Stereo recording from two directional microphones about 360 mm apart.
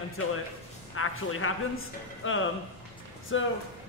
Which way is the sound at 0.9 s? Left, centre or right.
Left.